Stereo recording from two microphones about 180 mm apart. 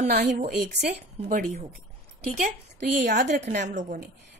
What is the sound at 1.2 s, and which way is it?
Speech, 50° right (ahead or behind).